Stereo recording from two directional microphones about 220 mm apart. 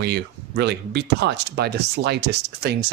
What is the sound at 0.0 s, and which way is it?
Speech, 50° right (ahead or behind).